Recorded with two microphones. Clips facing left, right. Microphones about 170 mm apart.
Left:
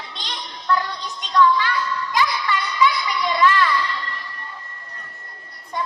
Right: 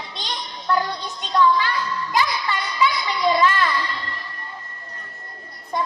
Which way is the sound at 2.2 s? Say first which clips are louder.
Left 1 dB; 35° right (ahead or behind).